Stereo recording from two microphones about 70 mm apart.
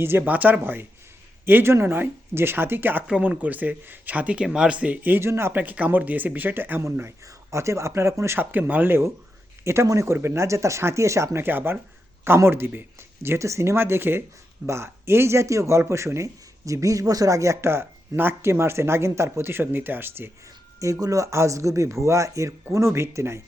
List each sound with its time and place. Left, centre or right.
0.0 s speech: right
3.1 s speech: centre
5.2 s speech: right
5.5 s speech: right
7.3 s speech: right
8.4 s speech: right
9.8 s speech: right
11.3 s speech: right
20.7 s speech: right